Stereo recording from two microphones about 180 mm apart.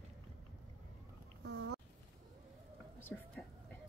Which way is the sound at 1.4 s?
70° right (ahead or behind).